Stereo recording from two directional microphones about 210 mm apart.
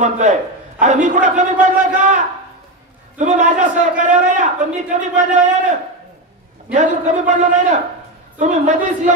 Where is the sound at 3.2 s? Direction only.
35° right (ahead or behind).